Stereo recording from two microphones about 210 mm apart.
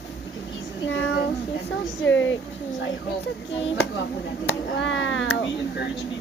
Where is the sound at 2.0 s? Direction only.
65° left (ahead or behind).